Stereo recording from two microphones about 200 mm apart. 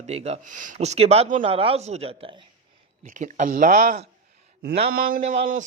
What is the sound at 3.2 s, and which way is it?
Speech, 40° right (ahead or behind).